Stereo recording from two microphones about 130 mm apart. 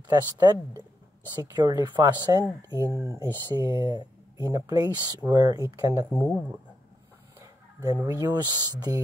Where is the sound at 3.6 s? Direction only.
30° right (ahead or behind).